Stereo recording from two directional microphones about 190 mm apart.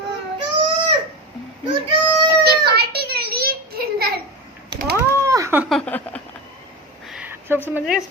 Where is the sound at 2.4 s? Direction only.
60° right (ahead or behind).